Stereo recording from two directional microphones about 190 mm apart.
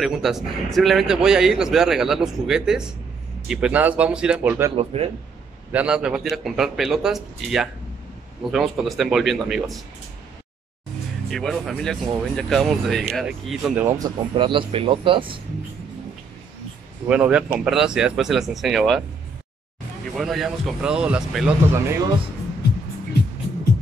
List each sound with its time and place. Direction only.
0.0 s speech: centre (ahead or behind)
4.7 s speech: 30° right (ahead or behind)
5.7 s speech: 5° right (ahead or behind)
11.2 s speech: centre (ahead or behind)
13.9 s speech: 20° right (ahead or behind)
17.1 s speech: 5° right (ahead or behind)
20.2 s speech: centre (ahead or behind)
21.8 s speech: 15° right (ahead or behind)